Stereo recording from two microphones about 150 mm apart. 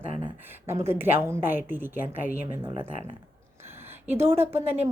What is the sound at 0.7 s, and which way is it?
A woman's voice, 15° right (ahead or behind).